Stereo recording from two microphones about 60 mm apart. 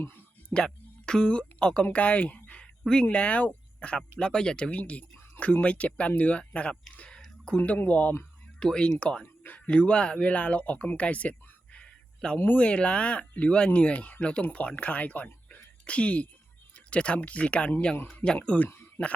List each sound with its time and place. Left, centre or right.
0.5 s speech: centre
6.9 s whispering: left
7.4 s speech: left
8.5 s speech: centre
9.2 s a sound: left
9.6 s speech: centre